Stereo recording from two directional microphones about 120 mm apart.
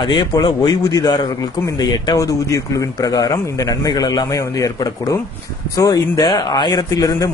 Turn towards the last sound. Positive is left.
turn(degrees=30)  # may be behind; listen again after turning